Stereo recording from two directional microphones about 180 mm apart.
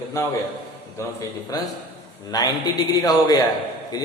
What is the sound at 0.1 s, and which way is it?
Speech, 15° left (ahead or behind).